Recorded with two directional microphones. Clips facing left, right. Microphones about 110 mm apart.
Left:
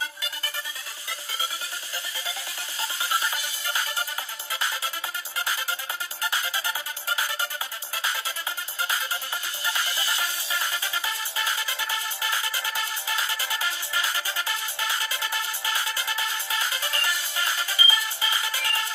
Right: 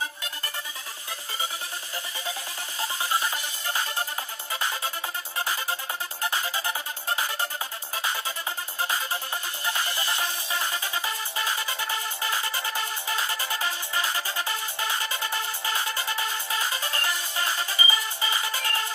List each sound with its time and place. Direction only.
3.1 s music: 20° right (ahead or behind)
9.6 s music: 20° right (ahead or behind)